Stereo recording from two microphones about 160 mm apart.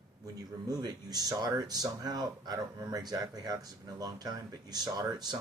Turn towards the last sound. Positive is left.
turn(degrees=-25)  # may be behind; listen again after turning